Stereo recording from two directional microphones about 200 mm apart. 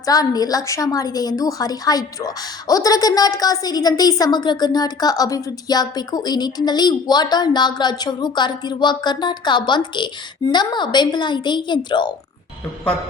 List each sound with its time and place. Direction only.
0.0 s a woman's voice: 20° left (ahead or behind)